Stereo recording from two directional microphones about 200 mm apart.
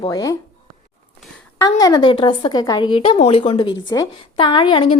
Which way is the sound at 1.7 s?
20° left (ahead or behind).